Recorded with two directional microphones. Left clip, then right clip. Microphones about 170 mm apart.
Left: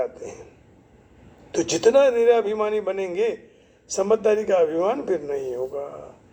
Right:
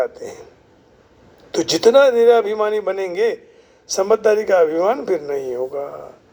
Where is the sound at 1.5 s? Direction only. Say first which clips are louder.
Right 5 dB; 30° right (ahead or behind).